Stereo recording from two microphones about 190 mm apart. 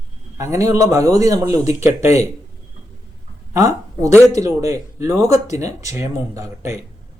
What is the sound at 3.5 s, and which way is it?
Speech, 15° right (ahead or behind).